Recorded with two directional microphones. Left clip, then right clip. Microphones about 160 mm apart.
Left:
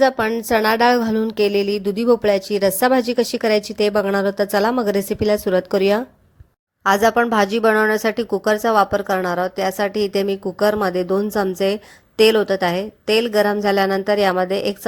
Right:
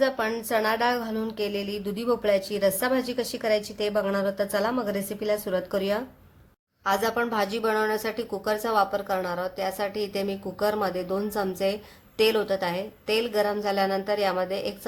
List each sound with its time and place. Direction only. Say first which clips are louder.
0.0 s a woman's voice: left 8 dB; 40° left (ahead or behind)